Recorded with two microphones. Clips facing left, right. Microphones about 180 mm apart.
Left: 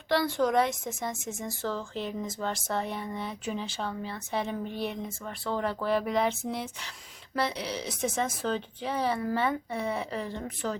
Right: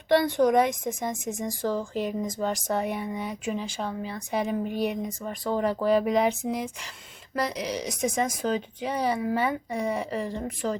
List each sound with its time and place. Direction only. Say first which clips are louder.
0.1 s a woman's voice: right 5 dB; 20° right (ahead or behind)